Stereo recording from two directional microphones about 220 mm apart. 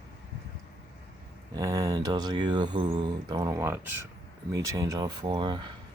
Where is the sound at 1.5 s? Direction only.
15° right (ahead or behind).